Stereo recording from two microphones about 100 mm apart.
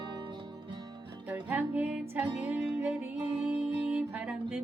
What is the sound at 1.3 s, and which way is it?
Music, 15° right (ahead or behind).